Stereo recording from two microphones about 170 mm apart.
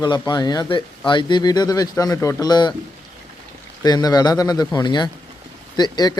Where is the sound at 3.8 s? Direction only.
25° left (ahead or behind).